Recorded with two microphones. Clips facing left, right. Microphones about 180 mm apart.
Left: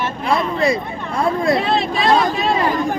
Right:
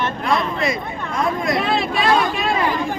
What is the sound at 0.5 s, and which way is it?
Speech, 30° left (ahead or behind).